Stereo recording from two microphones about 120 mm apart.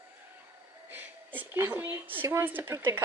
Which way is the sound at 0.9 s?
15° right (ahead or behind).